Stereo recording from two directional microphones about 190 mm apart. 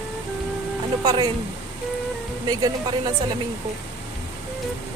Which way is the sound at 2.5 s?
20° right (ahead or behind).